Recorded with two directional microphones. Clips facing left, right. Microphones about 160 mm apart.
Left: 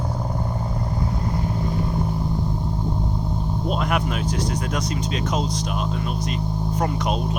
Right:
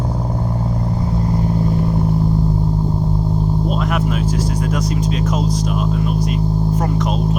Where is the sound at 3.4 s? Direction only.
Centre (ahead or behind).